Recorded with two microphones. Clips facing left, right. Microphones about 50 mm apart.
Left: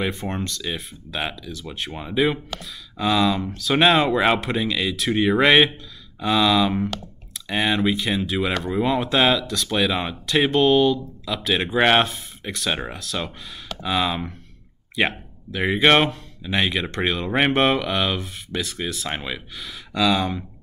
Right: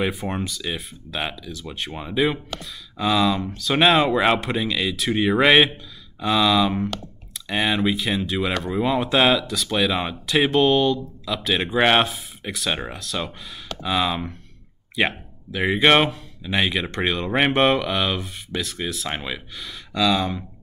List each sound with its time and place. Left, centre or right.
0.0 s speech: centre